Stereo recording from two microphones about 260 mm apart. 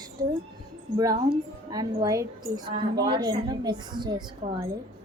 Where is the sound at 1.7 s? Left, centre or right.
Centre.